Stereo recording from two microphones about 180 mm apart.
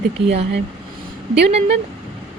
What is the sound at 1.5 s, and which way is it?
Speech, 35° right (ahead or behind).